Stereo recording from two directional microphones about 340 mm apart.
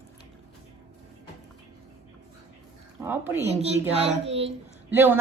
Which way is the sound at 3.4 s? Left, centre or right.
Centre.